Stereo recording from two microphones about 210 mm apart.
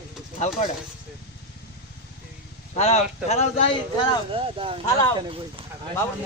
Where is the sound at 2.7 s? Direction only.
30° left (ahead or behind).